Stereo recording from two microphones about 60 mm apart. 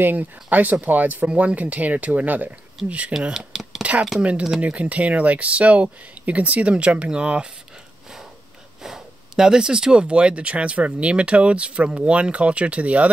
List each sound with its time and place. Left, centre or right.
0.0 s speech: right
3.1 s a sound: centre
4.2 s speech: right
8.8 s speech: centre